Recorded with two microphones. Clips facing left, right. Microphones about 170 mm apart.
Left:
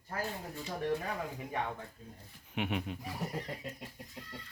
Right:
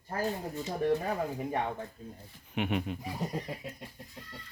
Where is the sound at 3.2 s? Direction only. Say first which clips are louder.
Right 3 dB; 15° right (ahead or behind).